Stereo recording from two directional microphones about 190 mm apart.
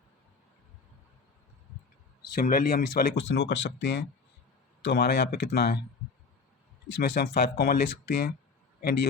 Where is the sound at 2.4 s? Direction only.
45° left (ahead or behind).